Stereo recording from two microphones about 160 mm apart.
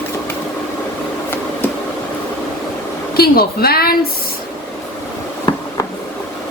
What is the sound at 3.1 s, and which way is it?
Speech, 70° left (ahead or behind).